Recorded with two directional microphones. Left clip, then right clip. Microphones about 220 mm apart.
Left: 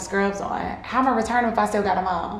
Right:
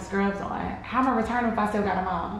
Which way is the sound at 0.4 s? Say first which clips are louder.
Left 4 dB; 35° left (ahead or behind).